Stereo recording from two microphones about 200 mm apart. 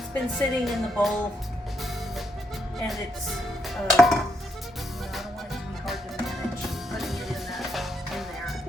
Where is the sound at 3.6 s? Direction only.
Centre (ahead or behind).